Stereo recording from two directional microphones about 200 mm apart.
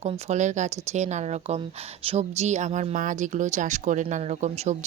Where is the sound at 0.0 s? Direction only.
35° right (ahead or behind).